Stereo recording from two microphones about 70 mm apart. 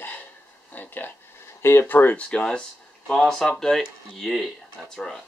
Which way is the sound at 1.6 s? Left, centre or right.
Left.